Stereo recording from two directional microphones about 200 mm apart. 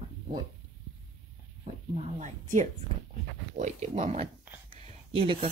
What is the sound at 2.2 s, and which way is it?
Speech, 40° right (ahead or behind).